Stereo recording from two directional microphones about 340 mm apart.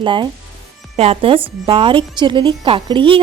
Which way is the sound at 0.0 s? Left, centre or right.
Centre.